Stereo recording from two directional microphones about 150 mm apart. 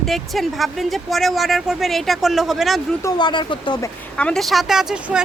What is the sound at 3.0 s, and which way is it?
Speech, 30° left (ahead or behind).